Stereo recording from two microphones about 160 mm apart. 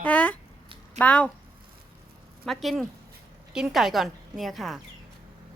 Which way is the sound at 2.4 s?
Centre (ahead or behind).